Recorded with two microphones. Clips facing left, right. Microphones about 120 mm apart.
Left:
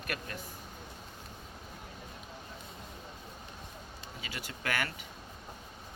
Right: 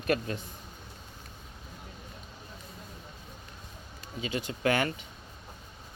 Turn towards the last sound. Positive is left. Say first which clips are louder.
# right 8 dB
turn(degrees=-25)  # may be behind; listen again after turning